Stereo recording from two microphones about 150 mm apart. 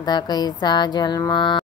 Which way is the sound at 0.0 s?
30° left (ahead or behind).